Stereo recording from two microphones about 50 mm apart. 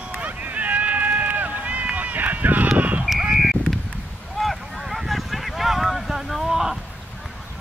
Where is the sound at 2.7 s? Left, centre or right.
Right.